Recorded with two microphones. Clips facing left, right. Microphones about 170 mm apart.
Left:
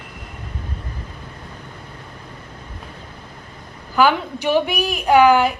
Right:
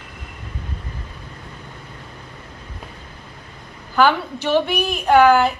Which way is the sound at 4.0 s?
10° left (ahead or behind).